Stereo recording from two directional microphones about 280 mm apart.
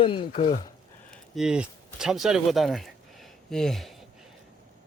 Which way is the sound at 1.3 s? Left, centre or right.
Centre.